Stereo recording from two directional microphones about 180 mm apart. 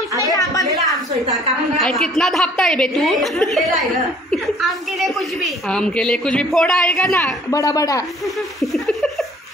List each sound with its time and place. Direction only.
0.3 s a sound: 20° left (ahead or behind)
1.8 s a woman's voice: centre (ahead or behind)
7.5 s a woman's voice: 20° left (ahead or behind)
8.5 s speech: centre (ahead or behind)